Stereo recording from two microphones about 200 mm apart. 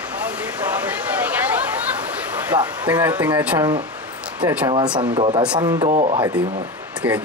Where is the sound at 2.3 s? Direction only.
5° right (ahead or behind).